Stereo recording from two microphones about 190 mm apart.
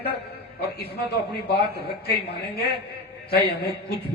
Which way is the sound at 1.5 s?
60° left (ahead or behind).